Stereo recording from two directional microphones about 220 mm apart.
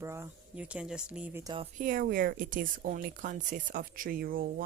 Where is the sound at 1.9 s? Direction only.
40° right (ahead or behind).